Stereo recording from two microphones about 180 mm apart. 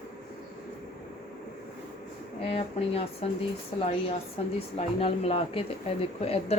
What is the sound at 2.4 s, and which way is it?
A woman's voice, 35° left (ahead or behind).